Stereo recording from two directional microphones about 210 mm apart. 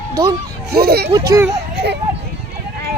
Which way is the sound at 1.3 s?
15° right (ahead or behind).